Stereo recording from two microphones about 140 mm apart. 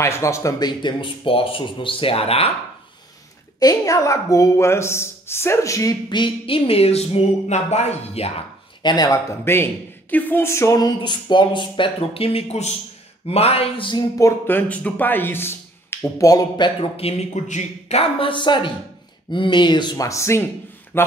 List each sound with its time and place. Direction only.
0.0 s speech: 20° left (ahead or behind); by 2.5 s 45° left (ahead or behind)
3.5 s a woman's voice: 25° left (ahead or behind); by 8.3 s 50° left (ahead or behind)
8.8 s a woman's voice: 30° left (ahead or behind)
9.4 s a man's voice: 15° left (ahead or behind); by 12.7 s 50° left (ahead or behind)
13.3 s a sound: 45° left (ahead or behind)
14.1 s a woman's voice: 20° left (ahead or behind)